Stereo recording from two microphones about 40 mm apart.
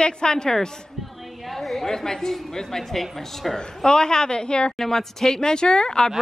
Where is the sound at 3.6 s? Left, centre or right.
Centre.